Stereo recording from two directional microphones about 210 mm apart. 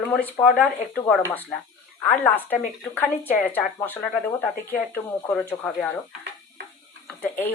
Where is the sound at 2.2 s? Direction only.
10° left (ahead or behind).